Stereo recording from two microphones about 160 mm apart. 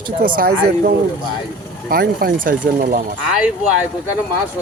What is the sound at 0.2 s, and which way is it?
Speech, 65° right (ahead or behind).